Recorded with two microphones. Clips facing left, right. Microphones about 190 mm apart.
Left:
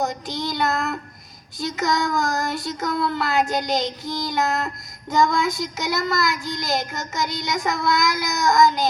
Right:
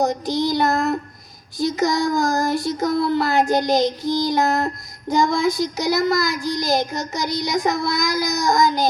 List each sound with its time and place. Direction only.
0.0 s child singing: 35° right (ahead or behind)